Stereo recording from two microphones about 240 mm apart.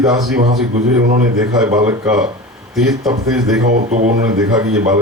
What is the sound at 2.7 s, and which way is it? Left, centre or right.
Speech, centre.